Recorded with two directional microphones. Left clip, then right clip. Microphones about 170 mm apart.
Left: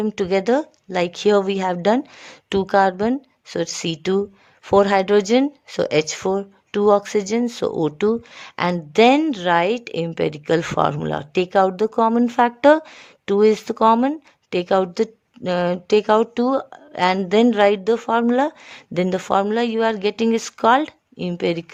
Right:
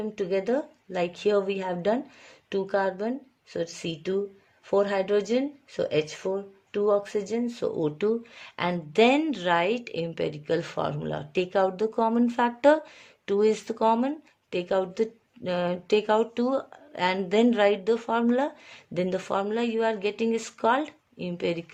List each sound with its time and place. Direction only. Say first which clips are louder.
0.0 s a woman's voice: left 8 dB; 50° left (ahead or behind)